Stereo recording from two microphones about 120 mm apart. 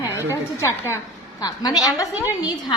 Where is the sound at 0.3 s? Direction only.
20° left (ahead or behind).